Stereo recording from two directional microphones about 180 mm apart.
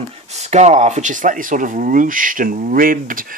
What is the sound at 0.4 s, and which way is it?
Speech, 40° right (ahead or behind).